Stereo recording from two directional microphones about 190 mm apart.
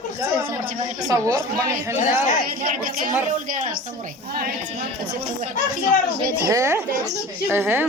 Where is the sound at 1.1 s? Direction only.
20° right (ahead or behind).